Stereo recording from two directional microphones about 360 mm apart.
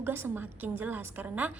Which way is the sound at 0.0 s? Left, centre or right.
Centre.